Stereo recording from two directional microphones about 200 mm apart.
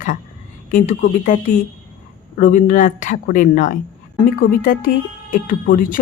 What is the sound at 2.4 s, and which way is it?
A woman's voice, 40° left (ahead or behind).